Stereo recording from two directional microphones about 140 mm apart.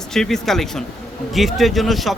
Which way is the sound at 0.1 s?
5° left (ahead or behind).